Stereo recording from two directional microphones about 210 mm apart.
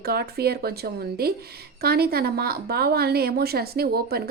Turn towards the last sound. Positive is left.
turn(degrees=-45)  # may be behind; listen again after turning